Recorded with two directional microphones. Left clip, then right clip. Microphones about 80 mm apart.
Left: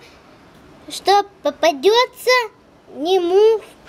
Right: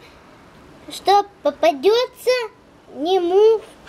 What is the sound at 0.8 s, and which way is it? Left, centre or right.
A child's voice, left.